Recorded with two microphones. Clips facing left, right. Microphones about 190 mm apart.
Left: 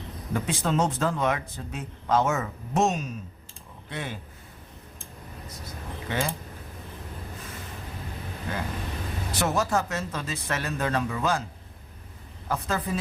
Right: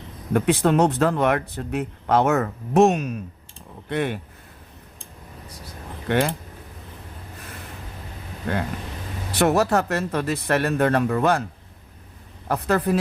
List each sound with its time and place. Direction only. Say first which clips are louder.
0.3 s speech: right 8 dB; 65° right (ahead or behind)
6.1 s speech: right 8 dB; 65° right (ahead or behind)
9.3 s speech: right 7 dB; 65° right (ahead or behind)
12.5 s speech: right 7 dB; 65° right (ahead or behind)